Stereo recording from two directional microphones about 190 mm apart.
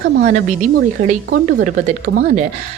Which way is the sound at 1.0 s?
45° right (ahead or behind).